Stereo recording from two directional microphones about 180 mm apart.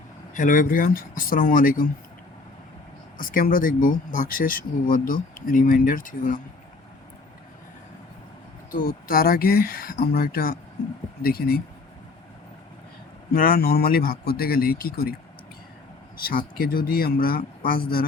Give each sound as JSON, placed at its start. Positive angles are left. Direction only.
{"t": 0.3, "sound": "speech", "side_deg": 50}
{"t": 3.2, "sound": "speech", "side_deg": 50}
{"t": 8.7, "sound": "speech", "side_deg": 55}
{"t": 13.3, "sound": "speech", "side_deg": 55}
{"t": 16.2, "sound": "speech", "side_deg": 50}